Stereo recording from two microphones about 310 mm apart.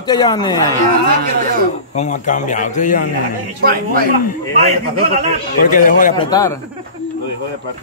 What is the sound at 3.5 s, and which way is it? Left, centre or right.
Speech, right.